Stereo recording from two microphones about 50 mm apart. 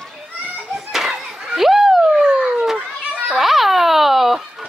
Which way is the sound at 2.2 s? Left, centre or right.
Centre.